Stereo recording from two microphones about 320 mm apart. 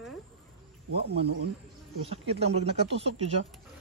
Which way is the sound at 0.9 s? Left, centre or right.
Right.